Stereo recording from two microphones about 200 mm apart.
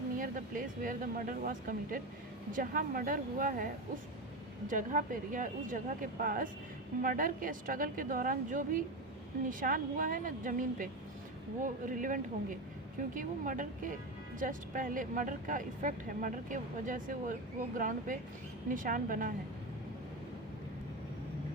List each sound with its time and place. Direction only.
0.2 s a woman's voice: 45° right (ahead or behind)
4.7 s a woman's voice: 40° right (ahead or behind)